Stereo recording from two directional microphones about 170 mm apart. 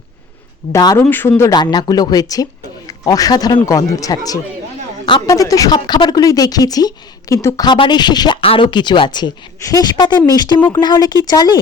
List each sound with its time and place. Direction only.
0.7 s a woman's voice: 20° left (ahead or behind)
1.0 s a woman's voice: 10° left (ahead or behind)